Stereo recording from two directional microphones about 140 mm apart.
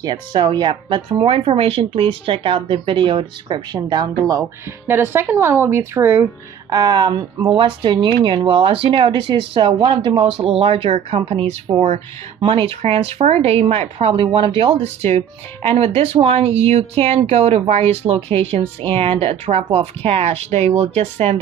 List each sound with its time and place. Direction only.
0.0 s speech: 35° right (ahead or behind); by 6.2 s 15° right (ahead or behind)
6.7 s speech: 30° right (ahead or behind)
10.4 s speech: 45° right (ahead or behind)